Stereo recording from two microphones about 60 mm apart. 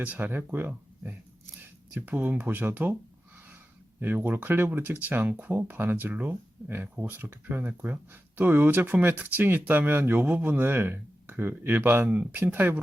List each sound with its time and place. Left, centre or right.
0.0 s speech: right
4.0 s speech: right
7.1 s speech: right
12.0 s speech: right